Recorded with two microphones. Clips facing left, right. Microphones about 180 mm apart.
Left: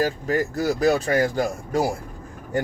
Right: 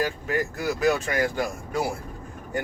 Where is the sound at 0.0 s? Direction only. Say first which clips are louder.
Left 4 dB; 40° left (ahead or behind).